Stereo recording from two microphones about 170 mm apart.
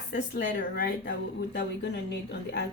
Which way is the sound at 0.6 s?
60° left (ahead or behind).